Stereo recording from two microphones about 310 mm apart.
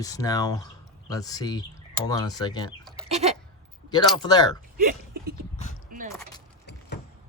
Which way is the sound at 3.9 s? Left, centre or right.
Centre.